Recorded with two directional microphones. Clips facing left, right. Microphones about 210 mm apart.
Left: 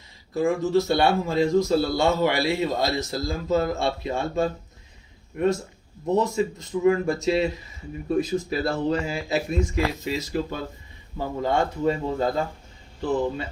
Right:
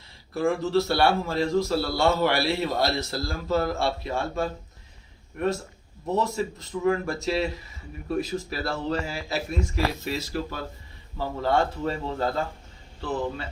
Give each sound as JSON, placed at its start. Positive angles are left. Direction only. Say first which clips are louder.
{"t": 0.3, "sound": "a man's voice", "louder": "left 2 dB", "side_deg": 15}
{"t": 6.1, "sound": "a man's voice", "louder": "left 4 dB", "side_deg": 15}